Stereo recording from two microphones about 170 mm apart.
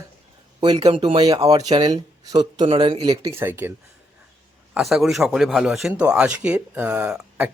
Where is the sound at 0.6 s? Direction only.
25° right (ahead or behind).